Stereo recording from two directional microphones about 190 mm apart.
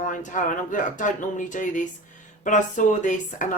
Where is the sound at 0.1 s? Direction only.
40° left (ahead or behind).